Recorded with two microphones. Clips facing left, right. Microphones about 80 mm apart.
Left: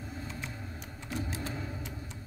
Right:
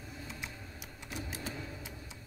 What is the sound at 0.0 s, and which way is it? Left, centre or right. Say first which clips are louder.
Vehicle: left 5 dB; left.